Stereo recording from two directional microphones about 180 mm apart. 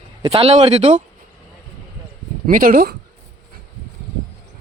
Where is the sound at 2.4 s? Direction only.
50° right (ahead or behind).